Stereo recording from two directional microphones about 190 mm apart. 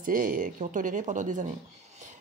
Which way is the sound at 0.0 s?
45° right (ahead or behind).